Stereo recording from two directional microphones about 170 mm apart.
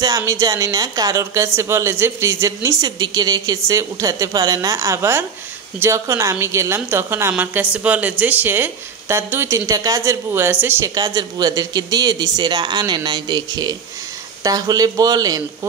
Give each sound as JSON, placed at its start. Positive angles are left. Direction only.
{"t": 0.0, "sound": "speech", "side_deg": -20}